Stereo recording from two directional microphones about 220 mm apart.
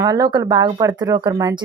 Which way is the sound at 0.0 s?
15° right (ahead or behind).